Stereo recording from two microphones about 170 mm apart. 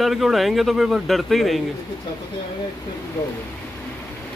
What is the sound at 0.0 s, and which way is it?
Speech, centre (ahead or behind).